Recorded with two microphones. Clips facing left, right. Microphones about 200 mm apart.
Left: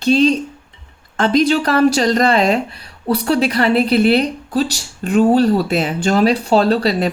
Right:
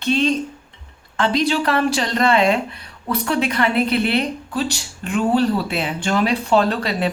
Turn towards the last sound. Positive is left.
turn(degrees=35)  # may be behind; listen again after turning